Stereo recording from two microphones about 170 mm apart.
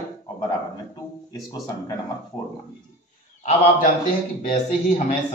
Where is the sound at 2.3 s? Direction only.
25° left (ahead or behind).